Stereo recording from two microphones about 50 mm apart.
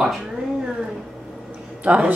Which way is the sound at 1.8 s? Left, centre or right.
Right.